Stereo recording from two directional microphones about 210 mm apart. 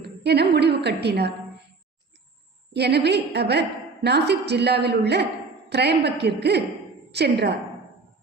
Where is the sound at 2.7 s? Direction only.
50° right (ahead or behind).